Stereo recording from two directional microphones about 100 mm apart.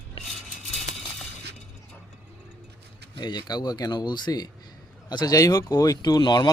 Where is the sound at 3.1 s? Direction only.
45° left (ahead or behind).